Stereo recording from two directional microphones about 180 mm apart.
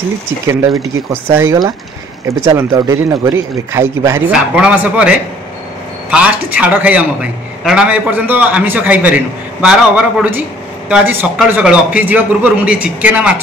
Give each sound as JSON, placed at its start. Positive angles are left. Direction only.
{"t": 0.5, "sound": "a man's voice", "side_deg": -15}